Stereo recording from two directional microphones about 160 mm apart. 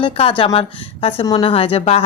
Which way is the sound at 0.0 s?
35° left (ahead or behind).